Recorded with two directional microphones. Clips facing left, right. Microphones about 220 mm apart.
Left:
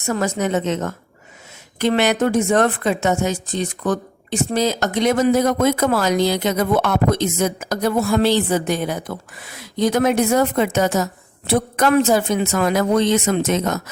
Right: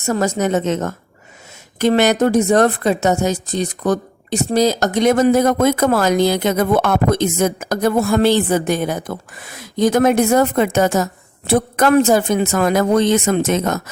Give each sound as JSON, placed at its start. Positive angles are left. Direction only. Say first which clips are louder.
{"t": 0.0, "sound": "speech", "louder": "right 3 dB", "side_deg": -40}